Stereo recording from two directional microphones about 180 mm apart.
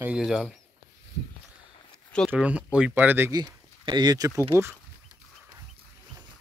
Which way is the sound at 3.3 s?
25° right (ahead or behind).